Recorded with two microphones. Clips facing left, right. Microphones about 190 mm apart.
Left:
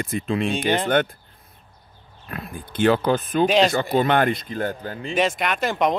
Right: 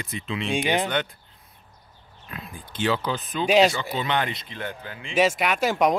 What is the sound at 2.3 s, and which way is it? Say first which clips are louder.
Speech: left 6 dB; 55° left (ahead or behind).